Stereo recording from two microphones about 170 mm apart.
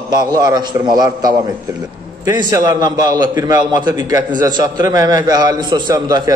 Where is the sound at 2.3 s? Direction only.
20° right (ahead or behind).